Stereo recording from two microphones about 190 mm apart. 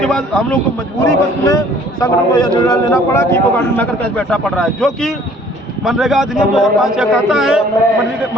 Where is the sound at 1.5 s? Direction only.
20° left (ahead or behind).